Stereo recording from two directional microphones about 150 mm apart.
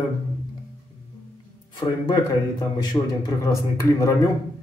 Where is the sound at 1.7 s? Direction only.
30° left (ahead or behind).